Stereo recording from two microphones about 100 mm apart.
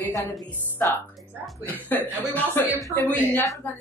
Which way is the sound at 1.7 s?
20° left (ahead or behind).